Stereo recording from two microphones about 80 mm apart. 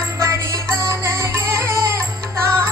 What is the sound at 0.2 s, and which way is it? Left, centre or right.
Music, right.